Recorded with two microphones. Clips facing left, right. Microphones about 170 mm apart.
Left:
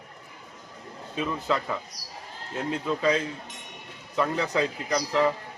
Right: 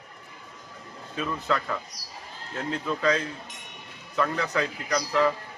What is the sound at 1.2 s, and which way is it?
Speech, 15° left (ahead or behind).